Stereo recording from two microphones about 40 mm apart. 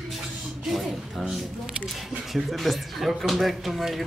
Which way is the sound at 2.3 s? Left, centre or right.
Centre.